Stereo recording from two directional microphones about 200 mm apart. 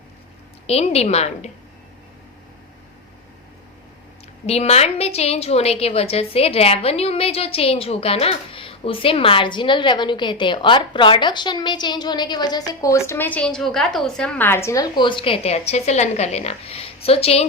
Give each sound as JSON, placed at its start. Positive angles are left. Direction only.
{"t": 0.7, "sound": "a woman's voice", "side_deg": 30}
{"t": 4.4, "sound": "a woman's voice", "side_deg": 30}